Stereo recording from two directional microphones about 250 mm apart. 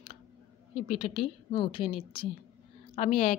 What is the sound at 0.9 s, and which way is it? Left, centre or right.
A woman's voice, left.